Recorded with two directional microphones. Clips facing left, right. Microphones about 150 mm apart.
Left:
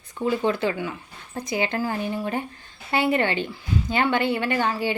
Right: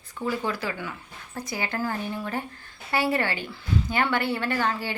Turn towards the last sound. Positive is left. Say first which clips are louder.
# left 3 dB
turn(degrees=15)  # may be behind; listen again after turning